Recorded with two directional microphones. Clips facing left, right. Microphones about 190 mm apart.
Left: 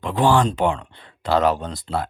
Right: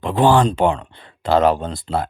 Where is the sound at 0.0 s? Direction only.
25° right (ahead or behind).